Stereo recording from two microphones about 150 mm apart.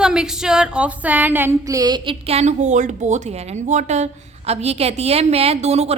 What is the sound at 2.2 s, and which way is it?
Speech, 45° right (ahead or behind).